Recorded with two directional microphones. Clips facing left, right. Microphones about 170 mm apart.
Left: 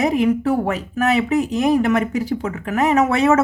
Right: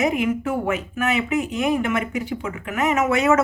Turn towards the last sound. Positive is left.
turn(degrees=30)  # may be behind; listen again after turning